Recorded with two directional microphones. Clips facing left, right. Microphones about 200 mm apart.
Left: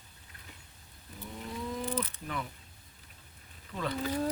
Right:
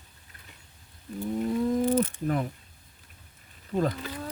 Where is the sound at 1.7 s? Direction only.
45° right (ahead or behind).